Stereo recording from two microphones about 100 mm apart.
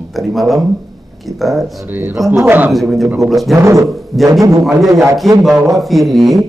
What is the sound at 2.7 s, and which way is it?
Speech, centre (ahead or behind).